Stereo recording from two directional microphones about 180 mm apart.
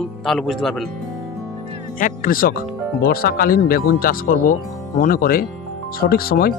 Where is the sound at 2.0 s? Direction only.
50° left (ahead or behind).